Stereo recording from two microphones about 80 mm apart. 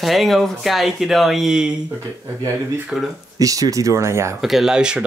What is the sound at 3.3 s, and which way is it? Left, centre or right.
Speech, right.